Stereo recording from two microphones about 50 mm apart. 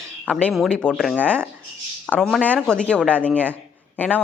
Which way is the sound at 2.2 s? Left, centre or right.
Centre.